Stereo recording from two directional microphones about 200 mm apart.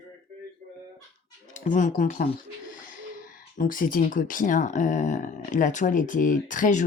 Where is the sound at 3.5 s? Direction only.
45° left (ahead or behind).